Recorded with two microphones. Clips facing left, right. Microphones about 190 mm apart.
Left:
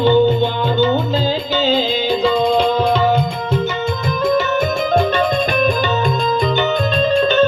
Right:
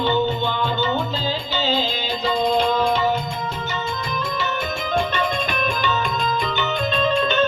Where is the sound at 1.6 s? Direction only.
55° left (ahead or behind).